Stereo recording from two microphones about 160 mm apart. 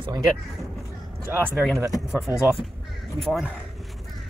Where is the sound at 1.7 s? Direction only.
20° right (ahead or behind).